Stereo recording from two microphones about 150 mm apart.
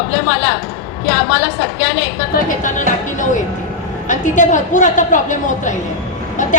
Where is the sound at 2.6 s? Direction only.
55° left (ahead or behind).